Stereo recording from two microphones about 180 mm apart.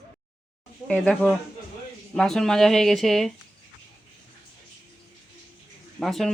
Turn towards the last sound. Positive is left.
turn(degrees=0)  # may be behind; listen again after turning